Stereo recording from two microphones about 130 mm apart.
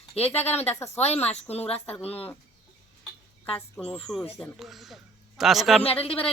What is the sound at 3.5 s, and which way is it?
Speech, 10° left (ahead or behind).